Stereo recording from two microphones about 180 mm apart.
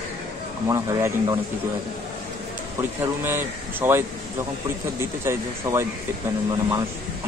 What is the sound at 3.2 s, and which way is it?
Speech, 10° right (ahead or behind).